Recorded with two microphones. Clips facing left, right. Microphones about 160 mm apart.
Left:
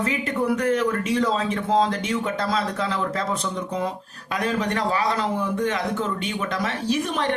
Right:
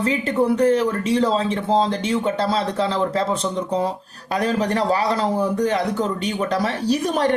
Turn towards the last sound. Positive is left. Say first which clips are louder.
# right 4 dB
turn(degrees=-40)  # may be behind; listen again after turning